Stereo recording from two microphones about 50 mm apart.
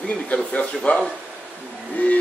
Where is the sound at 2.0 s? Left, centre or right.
Left.